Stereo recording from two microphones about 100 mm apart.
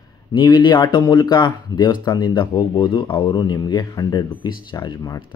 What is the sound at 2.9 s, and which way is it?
Speech, 60° left (ahead or behind).